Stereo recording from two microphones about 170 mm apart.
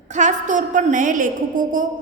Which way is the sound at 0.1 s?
45° right (ahead or behind).